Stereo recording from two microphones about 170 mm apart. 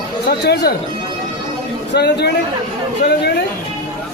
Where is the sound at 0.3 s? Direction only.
75° left (ahead or behind).